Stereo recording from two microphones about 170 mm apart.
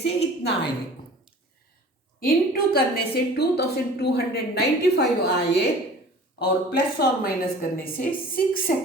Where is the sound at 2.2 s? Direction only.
60° left (ahead or behind); by 5.6 s 75° left (ahead or behind).